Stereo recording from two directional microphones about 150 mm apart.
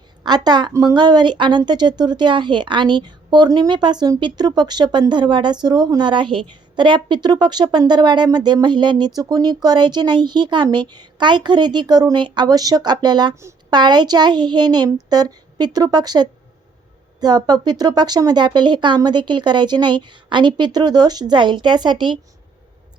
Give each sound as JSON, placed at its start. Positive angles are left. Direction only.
{"t": 0.2, "sound": "a woman's voice", "side_deg": -25}